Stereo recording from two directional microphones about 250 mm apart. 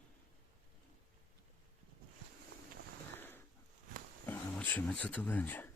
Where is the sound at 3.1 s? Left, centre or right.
Centre.